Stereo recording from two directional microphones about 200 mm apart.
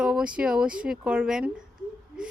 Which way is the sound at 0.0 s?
5° right (ahead or behind).